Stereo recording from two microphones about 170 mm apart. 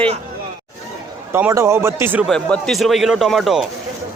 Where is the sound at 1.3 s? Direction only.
15° right (ahead or behind).